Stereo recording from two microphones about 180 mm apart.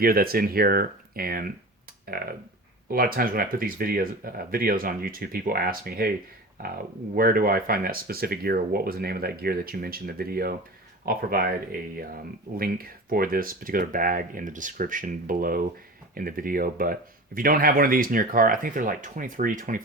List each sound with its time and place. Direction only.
0.0 s speech: 55° right (ahead or behind)